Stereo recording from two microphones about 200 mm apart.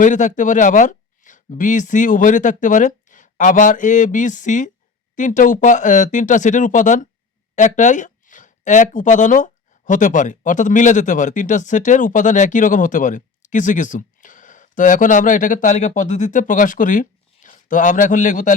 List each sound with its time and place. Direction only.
0.0 s speech: 40° left (ahead or behind)